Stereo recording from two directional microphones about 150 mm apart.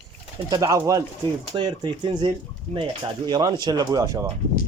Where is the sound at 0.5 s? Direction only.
20° right (ahead or behind).